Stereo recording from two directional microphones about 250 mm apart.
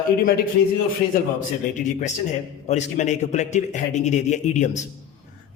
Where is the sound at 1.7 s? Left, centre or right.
Left.